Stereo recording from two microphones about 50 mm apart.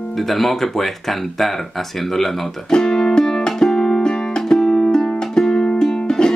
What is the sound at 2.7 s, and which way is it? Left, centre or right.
Music, centre.